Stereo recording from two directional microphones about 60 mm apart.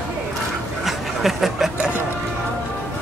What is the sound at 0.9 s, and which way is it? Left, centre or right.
Snicker, centre.